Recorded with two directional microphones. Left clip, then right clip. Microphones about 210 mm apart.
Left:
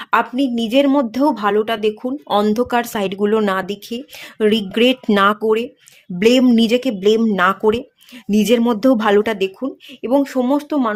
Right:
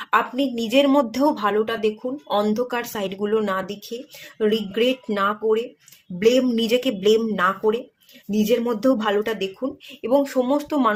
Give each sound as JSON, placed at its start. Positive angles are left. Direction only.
{"t": 0.0, "sound": "speech", "side_deg": 30}